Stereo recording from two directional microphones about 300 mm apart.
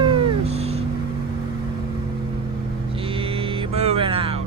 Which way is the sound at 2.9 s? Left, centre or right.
Centre.